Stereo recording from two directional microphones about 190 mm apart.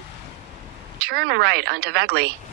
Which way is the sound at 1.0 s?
55° right (ahead or behind).